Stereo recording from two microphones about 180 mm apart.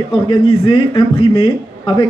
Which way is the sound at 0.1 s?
30° left (ahead or behind).